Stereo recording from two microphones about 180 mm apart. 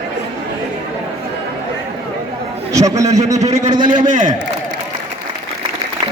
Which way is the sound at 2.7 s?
20° right (ahead or behind).